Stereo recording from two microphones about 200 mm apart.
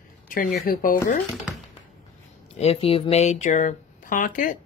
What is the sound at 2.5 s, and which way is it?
Speech, 30° left (ahead or behind).